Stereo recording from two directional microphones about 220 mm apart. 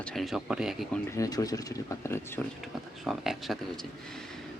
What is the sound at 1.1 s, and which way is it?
Speech, 15° left (ahead or behind).